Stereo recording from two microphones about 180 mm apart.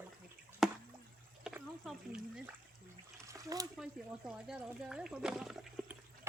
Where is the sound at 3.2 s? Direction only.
20° right (ahead or behind).